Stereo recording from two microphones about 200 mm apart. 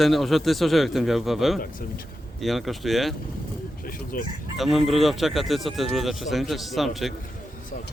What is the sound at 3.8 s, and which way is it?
Speech, 45° left (ahead or behind).